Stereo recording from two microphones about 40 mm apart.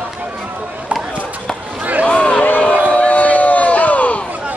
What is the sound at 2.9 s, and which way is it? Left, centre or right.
Crowd, left.